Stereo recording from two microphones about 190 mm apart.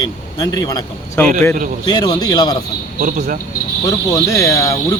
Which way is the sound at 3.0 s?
45° right (ahead or behind).